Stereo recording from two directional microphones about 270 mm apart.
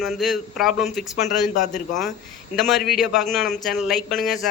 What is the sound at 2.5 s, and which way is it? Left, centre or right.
A man's voice, centre.